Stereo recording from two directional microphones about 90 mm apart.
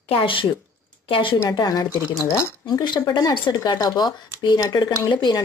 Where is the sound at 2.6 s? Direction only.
55° left (ahead or behind).